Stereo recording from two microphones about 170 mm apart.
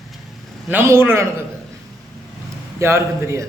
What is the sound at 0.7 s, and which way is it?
Speech, 15° right (ahead or behind).